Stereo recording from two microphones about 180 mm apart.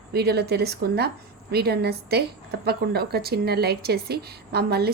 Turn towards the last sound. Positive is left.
turn(degrees=-60)  # may be behind; listen again after turning